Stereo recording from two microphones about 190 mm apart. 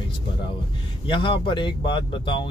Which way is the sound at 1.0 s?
25° left (ahead or behind).